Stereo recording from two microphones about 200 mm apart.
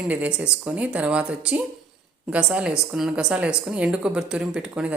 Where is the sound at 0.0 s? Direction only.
5° right (ahead or behind).